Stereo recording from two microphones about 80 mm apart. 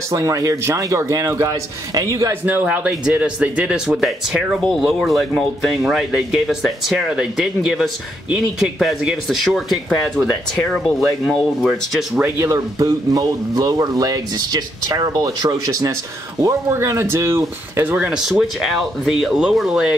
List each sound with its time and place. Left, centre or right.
0.1 s a man's voice: right
2.4 s a man's voice: right; by 12.0 s centre
12.4 s a man's voice: right
16.3 s speech: right
17.8 s speech: centre